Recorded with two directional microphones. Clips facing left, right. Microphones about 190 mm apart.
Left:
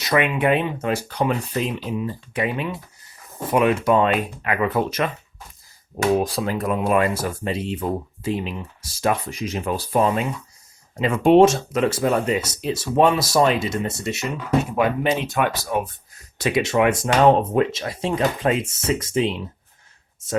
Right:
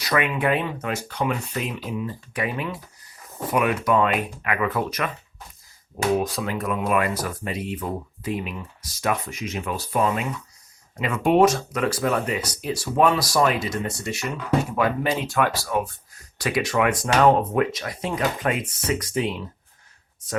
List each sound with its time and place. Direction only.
0.0 s speech: 20° left (ahead or behind)
0.9 s speech: 30° left (ahead or behind)
6.1 s speech: 30° left (ahead or behind)